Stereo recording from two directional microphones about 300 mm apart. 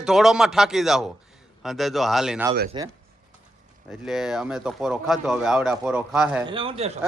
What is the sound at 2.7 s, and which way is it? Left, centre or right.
Speech, centre.